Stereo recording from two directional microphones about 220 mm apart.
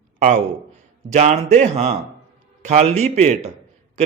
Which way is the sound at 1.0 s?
30° right (ahead or behind).